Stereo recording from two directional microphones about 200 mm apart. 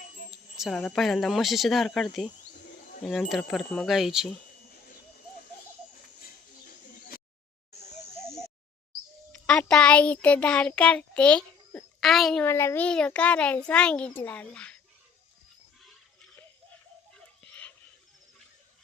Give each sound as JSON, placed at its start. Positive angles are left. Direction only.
{"t": 0.5, "sound": "a child's voice", "side_deg": 0}
{"t": 9.3, "sound": "a child's voice", "side_deg": 5}
{"t": 17.2, "sound": "a sound", "side_deg": 5}